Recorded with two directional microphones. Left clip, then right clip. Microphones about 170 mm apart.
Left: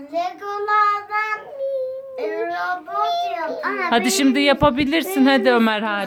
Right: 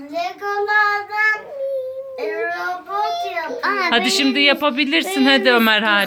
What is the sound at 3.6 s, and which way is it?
Speech, 55° right (ahead or behind).